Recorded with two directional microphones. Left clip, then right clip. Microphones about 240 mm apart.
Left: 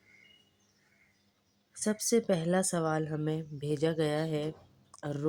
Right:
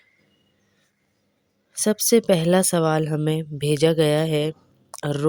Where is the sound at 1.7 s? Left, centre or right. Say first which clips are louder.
Right 11 dB; right.